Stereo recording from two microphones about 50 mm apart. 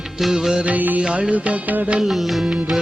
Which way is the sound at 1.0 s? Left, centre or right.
Centre.